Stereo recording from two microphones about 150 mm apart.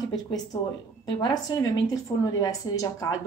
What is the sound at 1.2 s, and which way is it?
A woman's voice, 25° left (ahead or behind).